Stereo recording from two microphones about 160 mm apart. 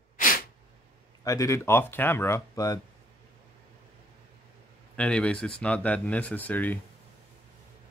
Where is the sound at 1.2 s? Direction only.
20° left (ahead or behind).